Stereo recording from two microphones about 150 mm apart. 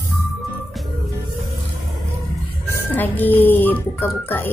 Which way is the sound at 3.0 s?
10° left (ahead or behind).